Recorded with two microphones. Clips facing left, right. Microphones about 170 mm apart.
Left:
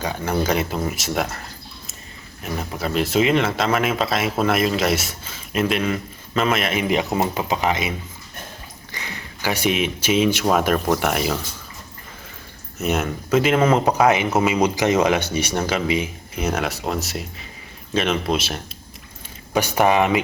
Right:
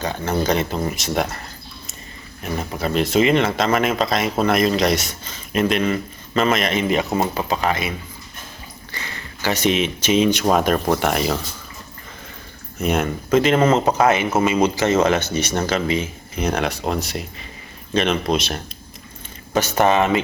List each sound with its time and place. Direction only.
0.0 s speech: 10° left (ahead or behind)
2.4 s speech: centre (ahead or behind)
7.0 s speech: centre (ahead or behind)
7.3 s speech: 15° left (ahead or behind)
12.8 s speech: 5° left (ahead or behind)